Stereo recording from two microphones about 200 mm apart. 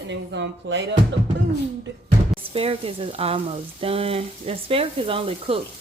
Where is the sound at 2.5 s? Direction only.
30° right (ahead or behind).